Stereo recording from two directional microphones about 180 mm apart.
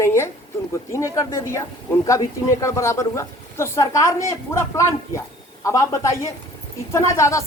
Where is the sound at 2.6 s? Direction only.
15° left (ahead or behind).